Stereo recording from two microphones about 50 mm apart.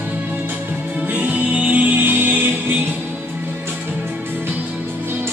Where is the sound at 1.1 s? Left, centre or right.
Right.